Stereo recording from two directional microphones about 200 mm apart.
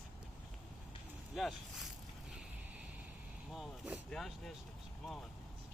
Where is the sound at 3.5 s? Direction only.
5° right (ahead or behind).